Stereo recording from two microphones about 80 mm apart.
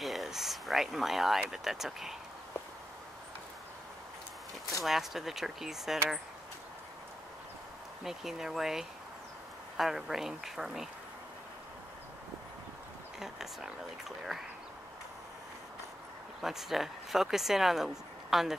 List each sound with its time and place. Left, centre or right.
0.0 s a sound: centre
1.5 s speech: centre
4.8 s speech: centre
8.0 s speech: centre
13.2 s speech: centre
16.3 s speech: centre